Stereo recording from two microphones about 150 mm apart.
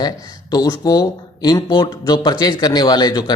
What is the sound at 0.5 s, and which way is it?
Speech, 25° left (ahead or behind).